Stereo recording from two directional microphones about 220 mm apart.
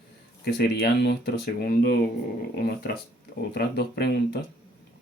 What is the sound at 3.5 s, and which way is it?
Speech, 50° left (ahead or behind).